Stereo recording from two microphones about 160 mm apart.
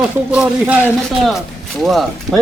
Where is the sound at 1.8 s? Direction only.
Centre (ahead or behind).